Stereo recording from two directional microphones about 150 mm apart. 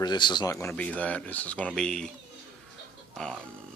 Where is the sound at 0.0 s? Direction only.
30° left (ahead or behind).